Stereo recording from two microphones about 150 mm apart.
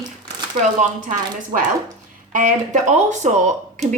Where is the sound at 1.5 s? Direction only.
60° right (ahead or behind).